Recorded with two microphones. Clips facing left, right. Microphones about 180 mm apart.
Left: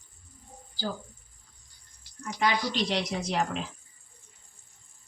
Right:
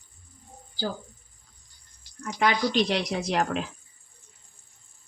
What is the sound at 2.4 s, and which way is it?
Speech, 65° right (ahead or behind).